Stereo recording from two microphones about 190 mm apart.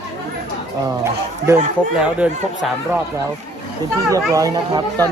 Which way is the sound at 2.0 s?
5° right (ahead or behind).